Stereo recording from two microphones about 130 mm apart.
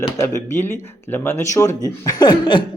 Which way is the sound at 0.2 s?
20° left (ahead or behind).